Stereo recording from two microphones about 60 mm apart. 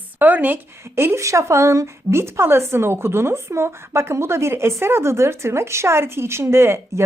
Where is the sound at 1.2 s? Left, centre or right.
Right.